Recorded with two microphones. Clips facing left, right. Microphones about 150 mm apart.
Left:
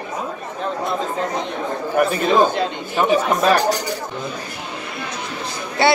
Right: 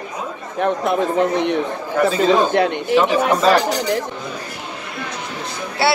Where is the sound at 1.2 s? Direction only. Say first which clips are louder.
Right 6 dB; 70° right (ahead or behind).